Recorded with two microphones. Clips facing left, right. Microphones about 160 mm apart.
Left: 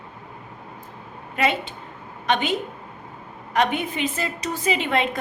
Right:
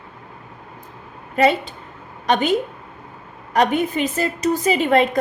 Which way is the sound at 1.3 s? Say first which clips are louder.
Right 6 dB; 40° right (ahead or behind).